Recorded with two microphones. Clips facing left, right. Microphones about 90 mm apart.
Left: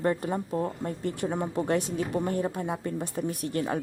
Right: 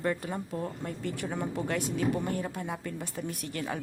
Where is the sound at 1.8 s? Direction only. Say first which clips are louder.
Left 1 dB; 40° left (ahead or behind).